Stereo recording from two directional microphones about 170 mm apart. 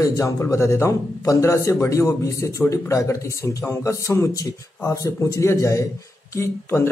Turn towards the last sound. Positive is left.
turn(degrees=15)  # may be behind; listen again after turning